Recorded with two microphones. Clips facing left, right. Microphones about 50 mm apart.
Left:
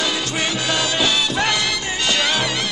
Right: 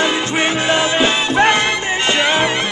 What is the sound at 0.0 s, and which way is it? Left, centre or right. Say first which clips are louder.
Music: right 6 dB; right.